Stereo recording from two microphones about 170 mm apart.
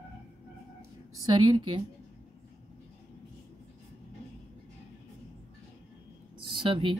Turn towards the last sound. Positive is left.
turn(degrees=-30)  # may be behind; listen again after turning